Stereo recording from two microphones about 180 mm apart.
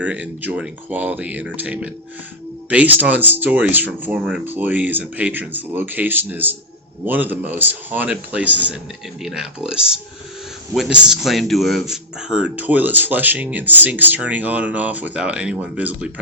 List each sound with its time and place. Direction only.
0.0 s speech: 10° right (ahead or behind)